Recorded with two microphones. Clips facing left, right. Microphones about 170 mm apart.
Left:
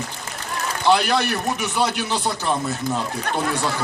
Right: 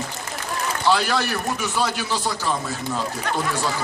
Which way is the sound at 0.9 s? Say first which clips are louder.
Left 3 dB; 20° left (ahead or behind).